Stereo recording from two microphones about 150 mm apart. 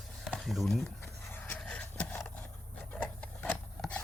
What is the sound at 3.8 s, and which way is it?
Scissors, 10° left (ahead or behind).